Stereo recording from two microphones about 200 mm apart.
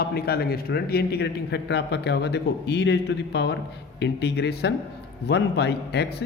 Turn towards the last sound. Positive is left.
turn(degrees=55)  # may be behind; listen again after turning